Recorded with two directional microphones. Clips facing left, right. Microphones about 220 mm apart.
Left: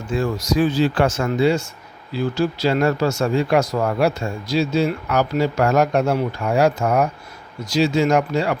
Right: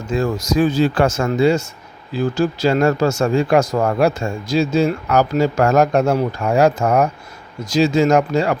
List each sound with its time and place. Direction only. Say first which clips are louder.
0.1 s speech: right 2 dB; 45° right (ahead or behind)